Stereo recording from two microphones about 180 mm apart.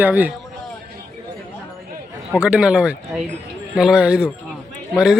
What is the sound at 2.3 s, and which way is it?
Speech, 5° right (ahead or behind).